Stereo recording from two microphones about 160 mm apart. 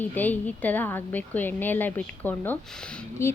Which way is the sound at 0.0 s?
10° left (ahead or behind).